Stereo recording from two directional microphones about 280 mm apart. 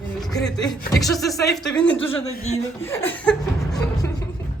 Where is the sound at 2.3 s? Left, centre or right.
Left.